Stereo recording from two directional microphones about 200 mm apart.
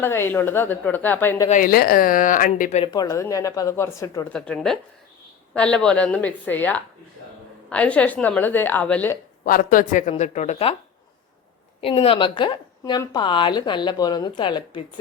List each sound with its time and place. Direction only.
0.0 s speech: 10° left (ahead or behind)
1.5 s speech: 40° left (ahead or behind)
2.8 s speech: 20° left (ahead or behind)
9.4 s speech: 45° left (ahead or behind)
11.8 s a woman's voice: 30° left (ahead or behind)